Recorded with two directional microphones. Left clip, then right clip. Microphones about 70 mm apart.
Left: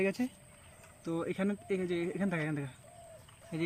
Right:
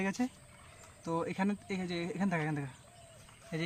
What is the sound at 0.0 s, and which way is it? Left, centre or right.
Speech, right.